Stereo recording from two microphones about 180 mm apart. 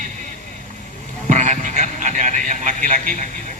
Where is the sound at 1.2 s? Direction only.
40° right (ahead or behind).